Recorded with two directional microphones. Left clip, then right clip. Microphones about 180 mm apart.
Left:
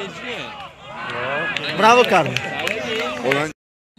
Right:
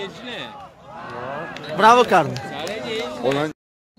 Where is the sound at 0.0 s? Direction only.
20° right (ahead or behind).